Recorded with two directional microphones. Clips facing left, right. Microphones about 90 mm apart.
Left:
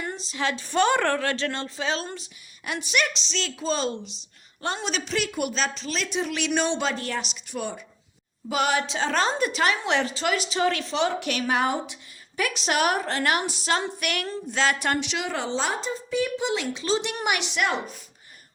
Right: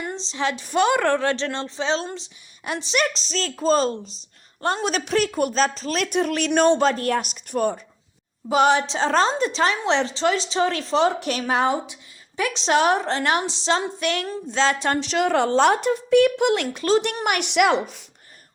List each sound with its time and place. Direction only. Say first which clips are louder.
0.0 s a woman's voice: right 3 dB; 20° right (ahead or behind); by 7.8 s 45° right (ahead or behind)
8.4 s a woman's voice: right 6 dB; 30° right (ahead or behind)
15.0 s a woman's voice: right 9 dB; 45° right (ahead or behind)
15.3 s a woman's voice: right 11 dB; 60° right (ahead or behind)
17.5 s speech: right 8 dB; 80° right